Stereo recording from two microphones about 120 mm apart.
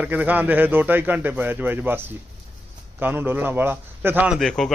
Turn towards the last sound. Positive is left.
turn(degrees=-10)  # may be behind; listen again after turning